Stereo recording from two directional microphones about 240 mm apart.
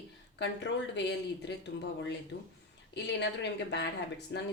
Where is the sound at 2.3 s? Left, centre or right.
Left.